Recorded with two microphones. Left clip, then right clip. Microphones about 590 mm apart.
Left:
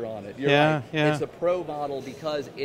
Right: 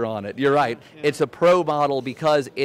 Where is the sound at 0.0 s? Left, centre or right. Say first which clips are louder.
Right 6 dB; right.